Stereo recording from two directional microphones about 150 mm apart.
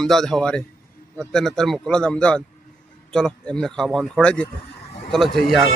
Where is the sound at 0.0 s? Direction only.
Centre (ahead or behind).